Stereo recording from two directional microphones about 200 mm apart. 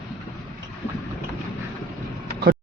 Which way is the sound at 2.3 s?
50° right (ahead or behind).